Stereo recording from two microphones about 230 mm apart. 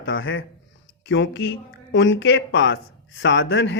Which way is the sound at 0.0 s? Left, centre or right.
Left.